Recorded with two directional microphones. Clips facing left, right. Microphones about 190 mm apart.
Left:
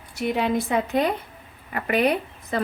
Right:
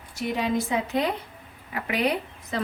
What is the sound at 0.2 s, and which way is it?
A woman's voice, 60° left (ahead or behind).